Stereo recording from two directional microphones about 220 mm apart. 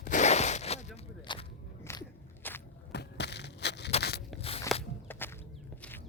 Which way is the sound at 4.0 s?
45° left (ahead or behind).